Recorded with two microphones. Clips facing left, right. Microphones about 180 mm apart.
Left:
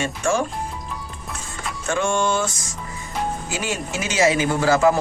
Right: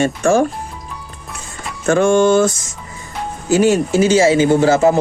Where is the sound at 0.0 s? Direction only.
45° right (ahead or behind).